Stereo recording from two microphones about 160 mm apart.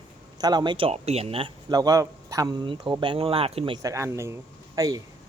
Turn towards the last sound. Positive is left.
turn(degrees=-20)  # may be behind; listen again after turning